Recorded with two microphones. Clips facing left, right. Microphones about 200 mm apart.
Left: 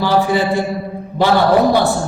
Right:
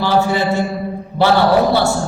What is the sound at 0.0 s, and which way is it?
Speech, 15° left (ahead or behind).